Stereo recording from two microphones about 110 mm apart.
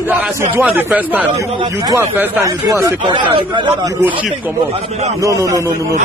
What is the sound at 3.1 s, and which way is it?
Speech, 50° right (ahead or behind).